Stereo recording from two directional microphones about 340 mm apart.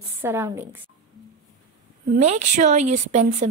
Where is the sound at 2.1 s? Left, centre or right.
Centre.